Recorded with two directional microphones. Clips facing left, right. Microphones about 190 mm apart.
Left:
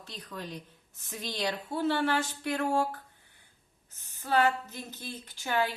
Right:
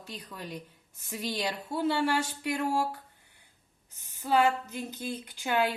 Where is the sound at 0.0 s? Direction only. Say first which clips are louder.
Even; 10° right (ahead or behind).